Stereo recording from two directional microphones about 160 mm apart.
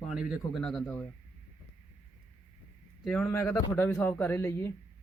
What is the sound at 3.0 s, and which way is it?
Speech, 5° left (ahead or behind).